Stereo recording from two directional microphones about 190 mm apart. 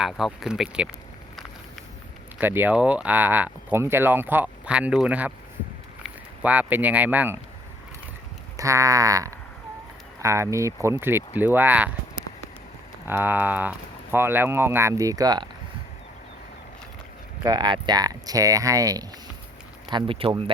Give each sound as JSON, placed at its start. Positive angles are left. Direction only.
{"t": 0.0, "sound": "speech", "side_deg": 0}
{"t": 2.4, "sound": "speech", "side_deg": -10}
{"t": 8.5, "sound": "speech", "side_deg": -15}
{"t": 13.1, "sound": "speech", "side_deg": -10}
{"t": 17.4, "sound": "speech", "side_deg": -20}